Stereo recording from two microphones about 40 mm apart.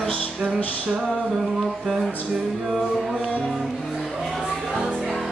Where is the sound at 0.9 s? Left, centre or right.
Centre.